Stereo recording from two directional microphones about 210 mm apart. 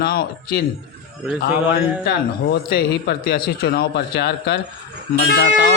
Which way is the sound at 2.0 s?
50° left (ahead or behind).